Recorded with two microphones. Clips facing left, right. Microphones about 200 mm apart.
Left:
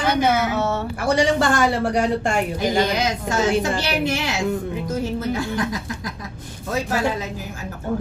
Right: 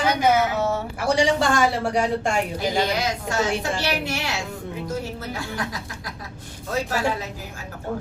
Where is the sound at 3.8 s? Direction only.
20° left (ahead or behind).